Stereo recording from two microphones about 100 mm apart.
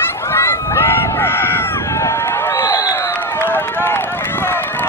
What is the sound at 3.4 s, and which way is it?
Run, 20° left (ahead or behind).